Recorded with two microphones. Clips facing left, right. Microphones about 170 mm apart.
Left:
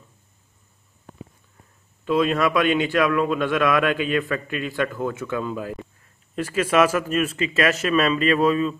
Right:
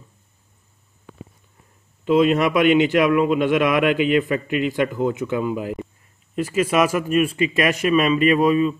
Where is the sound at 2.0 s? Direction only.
20° right (ahead or behind).